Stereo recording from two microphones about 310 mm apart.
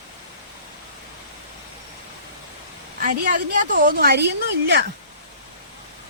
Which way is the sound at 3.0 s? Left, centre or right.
Right.